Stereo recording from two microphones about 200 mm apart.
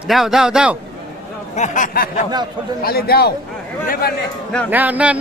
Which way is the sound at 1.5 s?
40° left (ahead or behind).